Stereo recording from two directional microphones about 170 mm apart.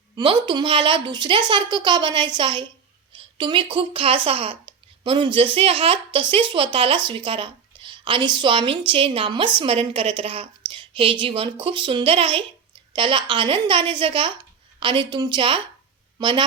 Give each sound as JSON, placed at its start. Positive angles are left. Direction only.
{"t": 0.2, "sound": "a woman's voice", "side_deg": -25}